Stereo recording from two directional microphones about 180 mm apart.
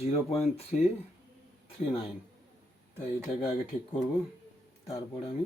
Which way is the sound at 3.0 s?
35° left (ahead or behind).